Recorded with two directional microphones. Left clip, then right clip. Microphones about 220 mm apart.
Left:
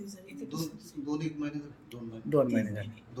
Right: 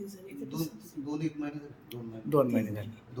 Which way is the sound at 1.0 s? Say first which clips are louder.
Even; 10° right (ahead or behind).